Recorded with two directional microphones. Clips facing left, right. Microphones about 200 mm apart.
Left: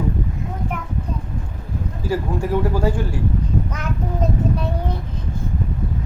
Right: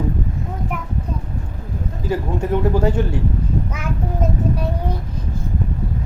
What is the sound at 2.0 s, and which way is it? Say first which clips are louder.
Speech: right 1 dB; 20° right (ahead or behind).